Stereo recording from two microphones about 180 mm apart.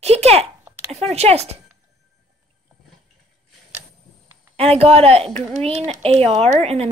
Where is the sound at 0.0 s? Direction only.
35° right (ahead or behind).